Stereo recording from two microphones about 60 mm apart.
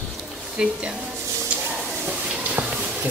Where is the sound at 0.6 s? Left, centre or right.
Centre.